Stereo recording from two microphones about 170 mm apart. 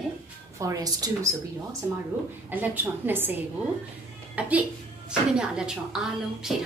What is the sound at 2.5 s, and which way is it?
Speech, 10° right (ahead or behind).